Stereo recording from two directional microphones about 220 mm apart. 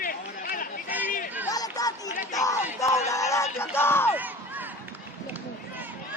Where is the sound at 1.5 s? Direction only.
15° left (ahead or behind).